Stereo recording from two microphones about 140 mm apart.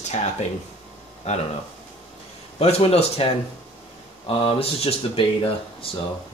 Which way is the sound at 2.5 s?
45° left (ahead or behind).